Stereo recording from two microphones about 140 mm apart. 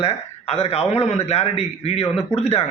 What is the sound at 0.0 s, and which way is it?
A man's voice, 45° left (ahead or behind).